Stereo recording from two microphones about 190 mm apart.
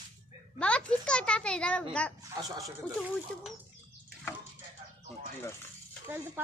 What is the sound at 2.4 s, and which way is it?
Speech, 20° right (ahead or behind).